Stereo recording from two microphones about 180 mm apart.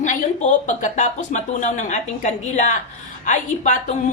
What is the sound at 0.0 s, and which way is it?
A woman's voice, 45° left (ahead or behind).